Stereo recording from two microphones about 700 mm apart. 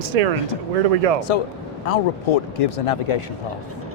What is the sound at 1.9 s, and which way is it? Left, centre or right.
Speech, left.